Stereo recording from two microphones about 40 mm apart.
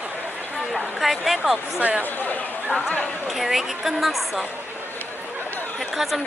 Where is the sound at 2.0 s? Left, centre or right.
Left.